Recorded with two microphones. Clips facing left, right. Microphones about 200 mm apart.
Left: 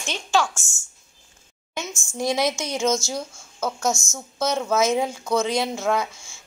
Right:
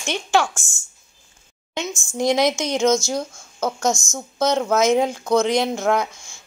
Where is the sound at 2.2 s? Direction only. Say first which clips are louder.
Right 4 dB; 15° right (ahead or behind).